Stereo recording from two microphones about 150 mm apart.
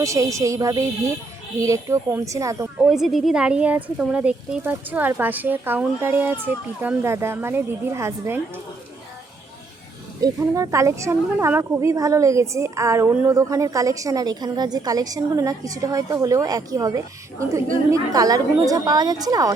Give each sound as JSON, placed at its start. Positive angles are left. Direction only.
{"t": 0.0, "sound": "a woman's voice", "side_deg": -20}
{"t": 2.8, "sound": "speech", "side_deg": -5}
{"t": 10.2, "sound": "a woman's voice", "side_deg": -25}